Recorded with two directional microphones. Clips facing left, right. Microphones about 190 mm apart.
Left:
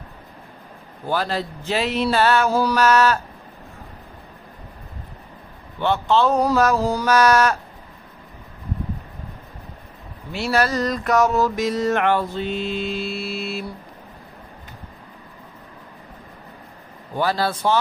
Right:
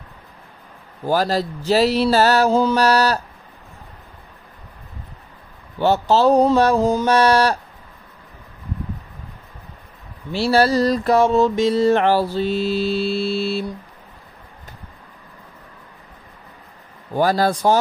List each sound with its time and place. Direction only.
1.0 s mantra: 40° right (ahead or behind)
2.5 s mantra: 25° right (ahead or behind)
5.8 s mantra: 40° right (ahead or behind)
10.3 s mantra: 30° right (ahead or behind)
17.2 s speech: 45° right (ahead or behind)